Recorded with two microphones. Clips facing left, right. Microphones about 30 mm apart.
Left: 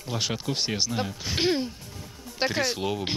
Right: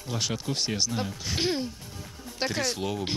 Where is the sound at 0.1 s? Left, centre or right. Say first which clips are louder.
Left 1 dB; centre.